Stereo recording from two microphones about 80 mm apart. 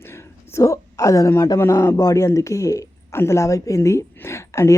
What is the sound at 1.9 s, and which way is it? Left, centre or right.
Speech, left.